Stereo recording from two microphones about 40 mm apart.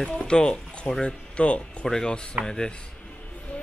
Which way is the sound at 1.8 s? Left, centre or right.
Centre.